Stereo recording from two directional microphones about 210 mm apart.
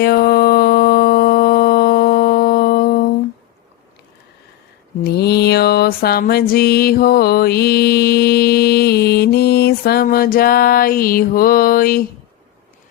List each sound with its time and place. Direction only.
0.0 s music: 50° left (ahead or behind)
5.0 s music: 50° left (ahead or behind)